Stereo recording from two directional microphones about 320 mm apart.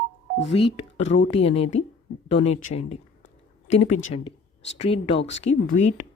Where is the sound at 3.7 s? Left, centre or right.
Left.